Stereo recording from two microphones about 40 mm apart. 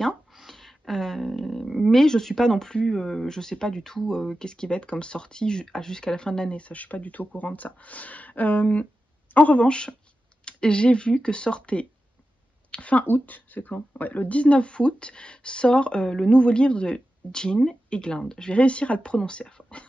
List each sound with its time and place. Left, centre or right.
0.3 s a sound: centre
1.3 s roaring cats: centre
1.9 s speech: centre; by 13.0 s left
13.0 s speech: left
14.4 s speech: left
18.5 s speech: left